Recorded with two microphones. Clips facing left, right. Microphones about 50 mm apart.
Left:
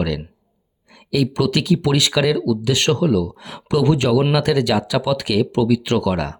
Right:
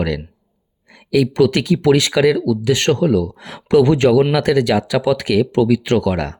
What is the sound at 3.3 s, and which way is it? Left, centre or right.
Speech, right.